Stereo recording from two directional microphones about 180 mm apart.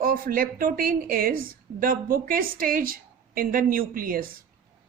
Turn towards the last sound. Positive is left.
turn(degrees=-50)  # may be behind; listen again after turning